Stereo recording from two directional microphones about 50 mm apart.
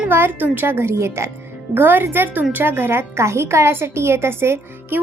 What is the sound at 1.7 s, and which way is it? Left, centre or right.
A woman's voice, right.